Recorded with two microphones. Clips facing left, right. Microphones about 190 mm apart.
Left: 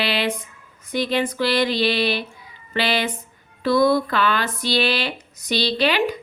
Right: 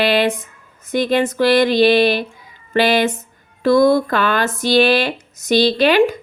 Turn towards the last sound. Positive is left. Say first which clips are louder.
# right 7 dB
turn(degrees=-45)  # may be behind; listen again after turning